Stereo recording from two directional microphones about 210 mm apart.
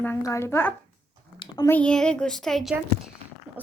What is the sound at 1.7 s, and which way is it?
Speech, 5° left (ahead or behind).